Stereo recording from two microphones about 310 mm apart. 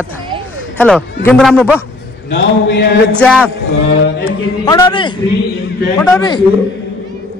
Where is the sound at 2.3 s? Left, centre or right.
Left.